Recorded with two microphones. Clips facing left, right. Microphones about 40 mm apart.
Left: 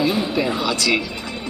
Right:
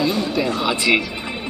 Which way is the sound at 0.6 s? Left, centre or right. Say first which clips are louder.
Right 2 dB; right.